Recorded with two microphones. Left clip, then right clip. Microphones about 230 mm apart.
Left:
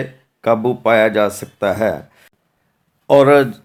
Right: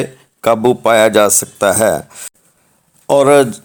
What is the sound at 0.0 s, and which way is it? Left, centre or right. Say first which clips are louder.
Speech: right 5 dB; right.